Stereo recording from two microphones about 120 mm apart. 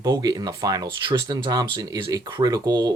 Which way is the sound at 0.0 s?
30° right (ahead or behind).